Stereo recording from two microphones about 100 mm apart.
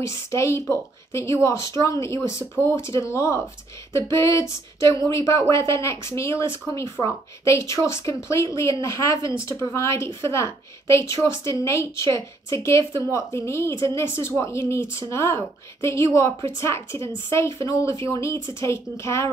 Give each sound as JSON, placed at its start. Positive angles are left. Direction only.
{"t": 0.0, "sound": "a woman's voice", "side_deg": 30}
{"t": 7.0, "sound": "a woman's voice", "side_deg": 0}
{"t": 7.4, "sound": "a woman's voice", "side_deg": 30}